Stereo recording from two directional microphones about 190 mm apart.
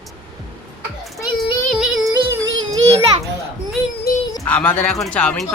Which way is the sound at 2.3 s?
15° right (ahead or behind).